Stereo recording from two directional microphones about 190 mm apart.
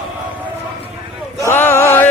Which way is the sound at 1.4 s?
10° left (ahead or behind).